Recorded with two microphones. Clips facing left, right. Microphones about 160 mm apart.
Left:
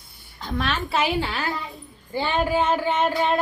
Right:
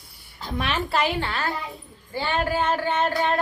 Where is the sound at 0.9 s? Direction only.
5° left (ahead or behind).